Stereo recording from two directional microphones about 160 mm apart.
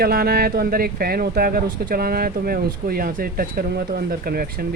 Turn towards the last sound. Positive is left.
turn(degrees=-70)  # may be behind; listen again after turning